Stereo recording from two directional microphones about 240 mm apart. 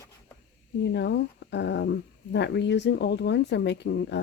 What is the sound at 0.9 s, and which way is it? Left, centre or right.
Speech, left.